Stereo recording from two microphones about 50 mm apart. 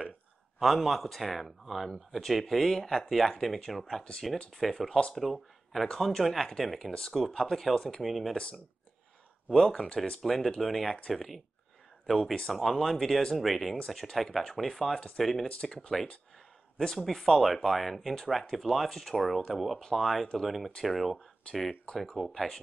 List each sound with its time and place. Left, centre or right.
0.6 s speech: centre
8.0 s speech: centre
8.3 s speech: centre
13.7 s speech: centre
15.4 s speech: centre
19.8 s speech: centre
21.5 s speech: left
21.9 s speech: centre